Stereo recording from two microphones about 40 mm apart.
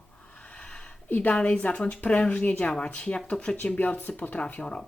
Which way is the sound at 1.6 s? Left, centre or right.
Left.